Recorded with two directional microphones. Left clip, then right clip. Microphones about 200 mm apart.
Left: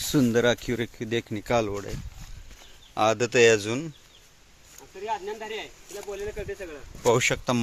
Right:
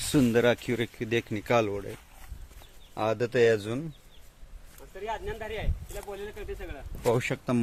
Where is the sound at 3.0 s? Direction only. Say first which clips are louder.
Left 5 dB; 10° left (ahead or behind).